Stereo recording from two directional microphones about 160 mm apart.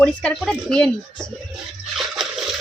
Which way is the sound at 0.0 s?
5° left (ahead or behind).